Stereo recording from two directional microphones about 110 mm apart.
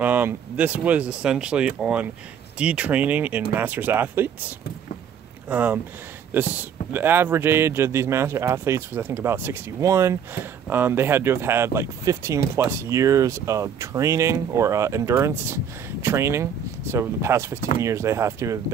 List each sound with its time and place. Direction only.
0.0 s speech: 15° right (ahead or behind)
6.9 s speech: 20° right (ahead or behind)